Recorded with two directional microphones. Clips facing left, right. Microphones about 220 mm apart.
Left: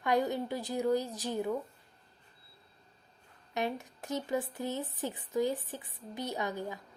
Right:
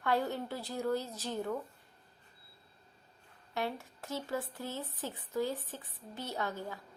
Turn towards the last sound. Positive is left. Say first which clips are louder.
# left 2 dB
turn(degrees=15)  # may be behind; listen again after turning